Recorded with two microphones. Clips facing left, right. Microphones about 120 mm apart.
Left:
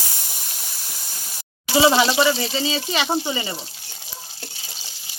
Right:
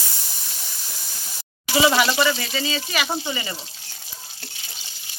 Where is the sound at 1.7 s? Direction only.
25° left (ahead or behind).